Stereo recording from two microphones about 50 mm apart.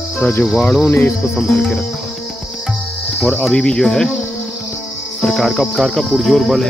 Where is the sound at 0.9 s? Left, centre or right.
Left.